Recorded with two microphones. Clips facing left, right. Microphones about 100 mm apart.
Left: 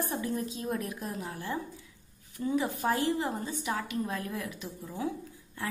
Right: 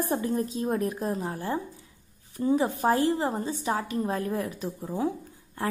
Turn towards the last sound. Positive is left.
turn(degrees=-40)  # may be behind; listen again after turning